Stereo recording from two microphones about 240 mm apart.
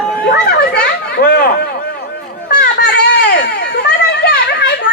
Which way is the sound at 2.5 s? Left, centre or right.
Left.